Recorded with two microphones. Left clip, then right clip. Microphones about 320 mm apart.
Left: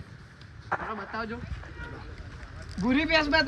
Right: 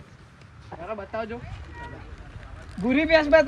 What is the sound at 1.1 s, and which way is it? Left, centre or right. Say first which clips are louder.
Speech: right 6 dB; centre.